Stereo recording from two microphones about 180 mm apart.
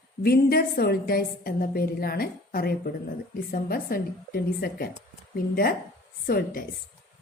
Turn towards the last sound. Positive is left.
turn(degrees=55)  # may be behind; listen again after turning